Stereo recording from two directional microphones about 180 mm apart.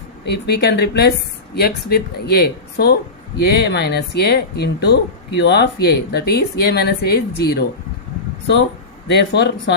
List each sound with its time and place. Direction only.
0.3 s speech: 65° left (ahead or behind)
9.0 s speech: 70° left (ahead or behind)